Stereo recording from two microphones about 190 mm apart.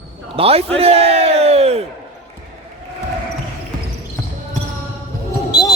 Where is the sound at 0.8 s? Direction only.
30° right (ahead or behind).